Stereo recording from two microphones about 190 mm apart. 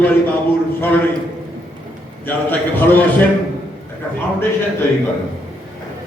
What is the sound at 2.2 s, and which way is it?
Speech, 10° left (ahead or behind).